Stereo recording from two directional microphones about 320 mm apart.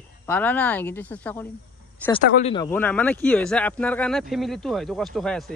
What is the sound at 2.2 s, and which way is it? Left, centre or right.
Speech, left.